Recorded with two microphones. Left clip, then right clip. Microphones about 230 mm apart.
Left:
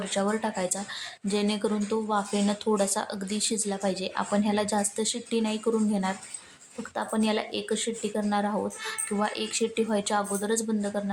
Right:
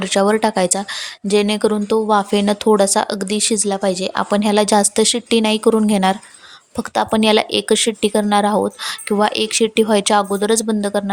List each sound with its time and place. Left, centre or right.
0.0 s speech: right